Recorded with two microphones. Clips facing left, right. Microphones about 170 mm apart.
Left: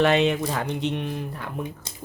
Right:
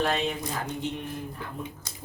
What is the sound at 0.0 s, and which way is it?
Speech, 75° left (ahead or behind).